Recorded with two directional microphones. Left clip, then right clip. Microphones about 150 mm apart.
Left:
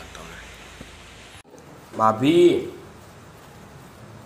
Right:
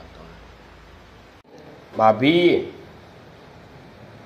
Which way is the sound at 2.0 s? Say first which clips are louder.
Right 1 dB; 15° right (ahead or behind).